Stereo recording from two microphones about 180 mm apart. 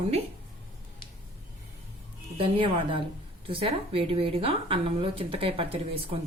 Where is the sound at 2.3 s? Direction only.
30° right (ahead or behind).